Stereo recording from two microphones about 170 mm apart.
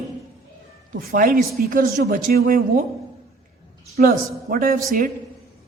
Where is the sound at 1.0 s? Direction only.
60° right (ahead or behind).